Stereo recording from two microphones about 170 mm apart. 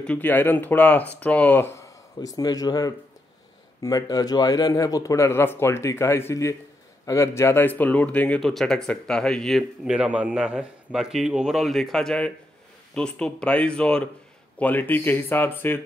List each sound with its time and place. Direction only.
0.0 s speech: 10° left (ahead or behind)